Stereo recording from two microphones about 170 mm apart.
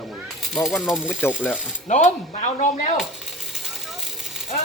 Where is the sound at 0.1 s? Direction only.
Centre (ahead or behind).